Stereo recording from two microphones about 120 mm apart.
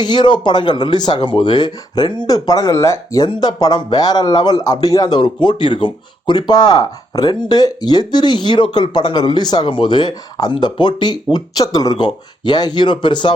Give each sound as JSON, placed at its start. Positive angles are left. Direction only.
{"t": 0.0, "sound": "speech", "side_deg": 40}